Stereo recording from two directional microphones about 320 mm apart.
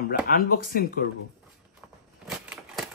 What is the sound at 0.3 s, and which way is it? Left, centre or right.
Speech, left.